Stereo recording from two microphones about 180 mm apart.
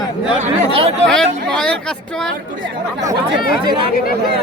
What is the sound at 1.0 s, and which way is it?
Speech, 5° left (ahead or behind).